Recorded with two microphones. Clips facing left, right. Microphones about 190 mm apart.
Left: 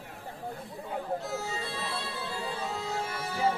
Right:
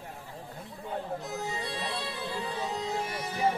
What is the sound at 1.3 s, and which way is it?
Music, 15° right (ahead or behind).